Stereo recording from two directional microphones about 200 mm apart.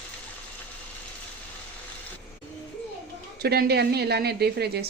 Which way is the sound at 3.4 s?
50° right (ahead or behind).